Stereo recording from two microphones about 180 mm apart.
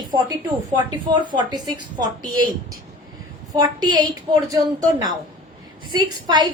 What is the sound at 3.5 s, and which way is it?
A woman's voice, 20° right (ahead or behind).